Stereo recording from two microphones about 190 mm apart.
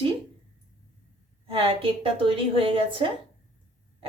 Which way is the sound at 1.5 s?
30° right (ahead or behind).